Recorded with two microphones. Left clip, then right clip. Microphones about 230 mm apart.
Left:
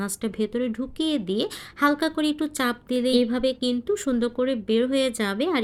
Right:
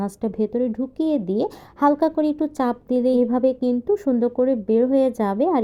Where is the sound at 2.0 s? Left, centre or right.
Left.